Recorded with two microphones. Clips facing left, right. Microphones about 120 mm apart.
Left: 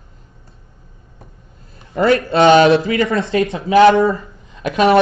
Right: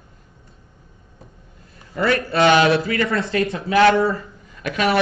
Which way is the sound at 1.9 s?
25° left (ahead or behind).